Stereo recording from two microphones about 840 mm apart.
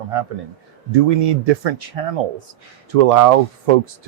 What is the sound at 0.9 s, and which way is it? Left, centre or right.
Speech, right.